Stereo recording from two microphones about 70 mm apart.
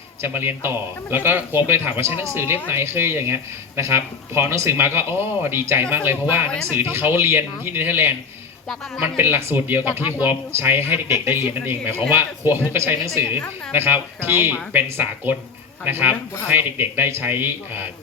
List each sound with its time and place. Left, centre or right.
0.2 s speech: right
9.1 s a man's voice: right